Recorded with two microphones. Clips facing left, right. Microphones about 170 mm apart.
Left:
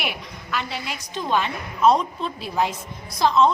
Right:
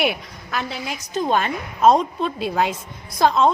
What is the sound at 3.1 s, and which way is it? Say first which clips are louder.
Speech: right 1 dB; 50° right (ahead or behind).